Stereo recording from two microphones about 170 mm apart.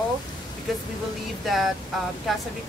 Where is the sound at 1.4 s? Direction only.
Centre (ahead or behind).